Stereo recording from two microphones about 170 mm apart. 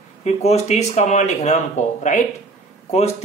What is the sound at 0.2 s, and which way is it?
Speech, 40° left (ahead or behind).